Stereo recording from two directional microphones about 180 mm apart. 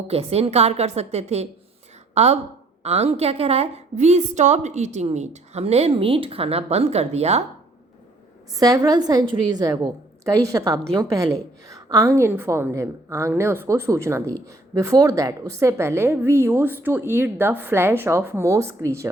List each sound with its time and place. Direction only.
0.1 s a woman's voice: 35° right (ahead or behind)
8.5 s a woman's voice: 20° right (ahead or behind)